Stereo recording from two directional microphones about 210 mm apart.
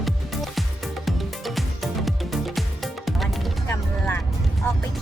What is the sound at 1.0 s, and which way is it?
Music, centre (ahead or behind).